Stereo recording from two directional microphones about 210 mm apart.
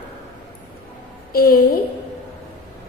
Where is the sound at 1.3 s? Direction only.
45° left (ahead or behind).